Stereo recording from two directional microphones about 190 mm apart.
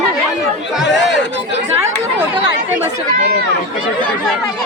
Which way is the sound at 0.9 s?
65° left (ahead or behind).